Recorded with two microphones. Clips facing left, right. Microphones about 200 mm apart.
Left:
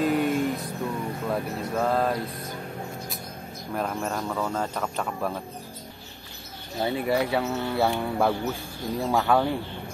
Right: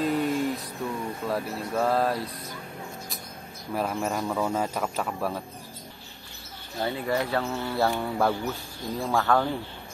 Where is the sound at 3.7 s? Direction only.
5° right (ahead or behind).